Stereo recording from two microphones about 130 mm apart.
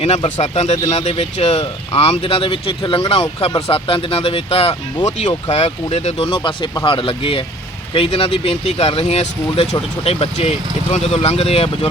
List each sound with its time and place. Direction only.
0.0 s speech: 55° left (ahead or behind)
5.0 s speech: 65° left (ahead or behind)
5.5 s speech: 55° left (ahead or behind)